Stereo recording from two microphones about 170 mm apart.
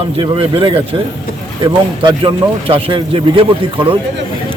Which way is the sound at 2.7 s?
30° right (ahead or behind).